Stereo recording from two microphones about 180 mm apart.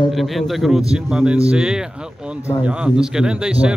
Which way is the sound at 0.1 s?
Centre (ahead or behind).